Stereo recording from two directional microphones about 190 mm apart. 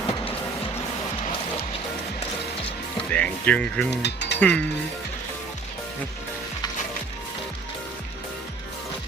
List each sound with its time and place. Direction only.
3.0 s speech: 5° left (ahead or behind)
4.0 s speech: 60° left (ahead or behind)
4.4 s speech: 5° left (ahead or behind)